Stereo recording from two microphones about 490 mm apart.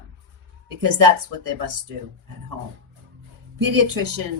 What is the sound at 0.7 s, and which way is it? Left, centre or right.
A woman's voice, right.